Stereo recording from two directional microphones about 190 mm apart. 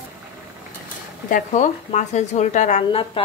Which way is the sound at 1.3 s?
45° left (ahead or behind).